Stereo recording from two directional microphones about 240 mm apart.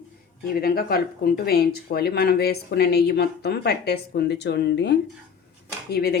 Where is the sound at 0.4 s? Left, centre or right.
Left.